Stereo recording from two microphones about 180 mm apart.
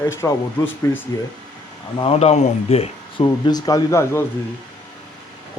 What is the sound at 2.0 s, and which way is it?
Speech, 35° left (ahead or behind).